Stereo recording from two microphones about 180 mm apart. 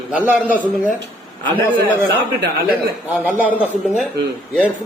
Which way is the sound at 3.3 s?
10° right (ahead or behind).